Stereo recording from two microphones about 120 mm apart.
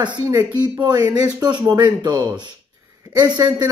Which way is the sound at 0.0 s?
35° right (ahead or behind).